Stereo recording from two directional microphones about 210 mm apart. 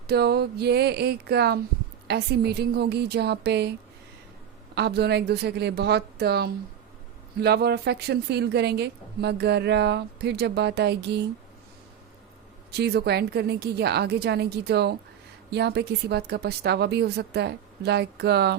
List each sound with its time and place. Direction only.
0.1 s a woman's voice: 50° right (ahead or behind)
4.7 s a woman's voice: 50° right (ahead or behind)
12.7 s a woman's voice: 50° right (ahead or behind)